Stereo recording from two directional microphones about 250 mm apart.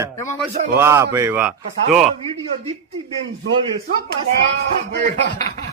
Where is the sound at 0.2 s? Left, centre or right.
Centre.